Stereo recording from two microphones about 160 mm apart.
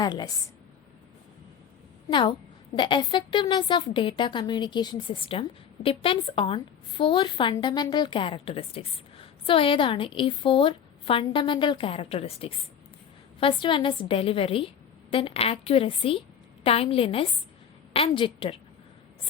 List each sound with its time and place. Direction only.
0.0 s a woman's voice: 25° left (ahead or behind)
2.0 s a woman's voice: 30° left (ahead or behind)